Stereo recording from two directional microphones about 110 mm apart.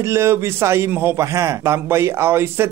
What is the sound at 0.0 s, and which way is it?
A man's voice, 25° right (ahead or behind).